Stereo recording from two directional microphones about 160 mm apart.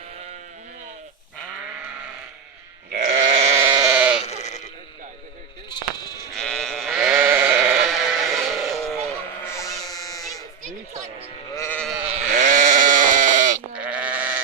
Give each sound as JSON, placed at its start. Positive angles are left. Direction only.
{"t": 3.3, "sound": "sheep", "side_deg": -40}
{"t": 3.7, "sound": "sheep", "side_deg": -25}
{"t": 3.9, "sound": "sheep", "side_deg": -10}
{"t": 4.2, "sound": "sheep", "side_deg": 45}
{"t": 5.6, "sound": "sheep", "side_deg": 25}
{"t": 6.3, "sound": "sheep", "side_deg": 5}
{"t": 7.2, "sound": "sheep", "side_deg": -15}
{"t": 9.4, "sound": "bleat", "side_deg": 15}
{"t": 11.5, "sound": "sheep", "side_deg": 15}
{"t": 11.8, "sound": "sheep", "side_deg": 0}
{"t": 12.0, "sound": "sheep", "side_deg": -45}
{"t": 13.7, "sound": "sheep", "side_deg": -10}